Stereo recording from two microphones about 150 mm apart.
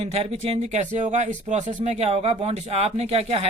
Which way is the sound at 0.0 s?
40° right (ahead or behind).